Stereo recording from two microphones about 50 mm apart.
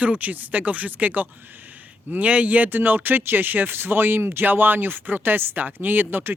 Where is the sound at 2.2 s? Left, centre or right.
Right.